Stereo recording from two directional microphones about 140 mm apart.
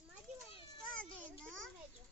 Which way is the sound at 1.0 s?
5° left (ahead or behind).